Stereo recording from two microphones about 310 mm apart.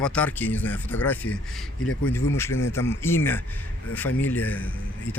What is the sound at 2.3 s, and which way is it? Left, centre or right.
Speech, centre.